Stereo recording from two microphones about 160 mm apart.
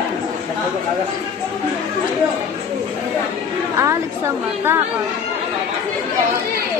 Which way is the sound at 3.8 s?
15° right (ahead or behind).